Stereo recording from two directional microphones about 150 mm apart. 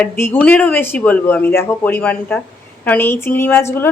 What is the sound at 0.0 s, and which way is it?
A woman's voice, 10° left (ahead or behind).